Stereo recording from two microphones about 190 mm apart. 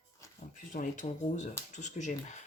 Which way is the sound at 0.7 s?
40° left (ahead or behind).